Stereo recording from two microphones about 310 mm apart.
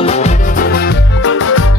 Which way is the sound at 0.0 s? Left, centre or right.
Left.